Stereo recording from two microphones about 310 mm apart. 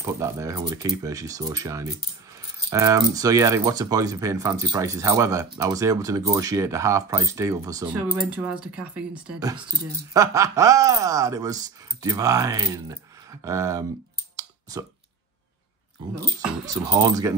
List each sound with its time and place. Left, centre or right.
0.0 s speech: centre
14.3 s clicking: centre
16.3 s speech: centre